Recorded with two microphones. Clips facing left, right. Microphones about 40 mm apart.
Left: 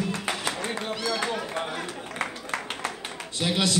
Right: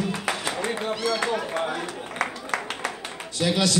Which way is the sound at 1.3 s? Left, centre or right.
Centre.